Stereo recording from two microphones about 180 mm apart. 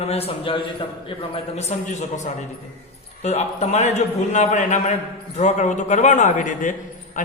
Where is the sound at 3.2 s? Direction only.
40° left (ahead or behind).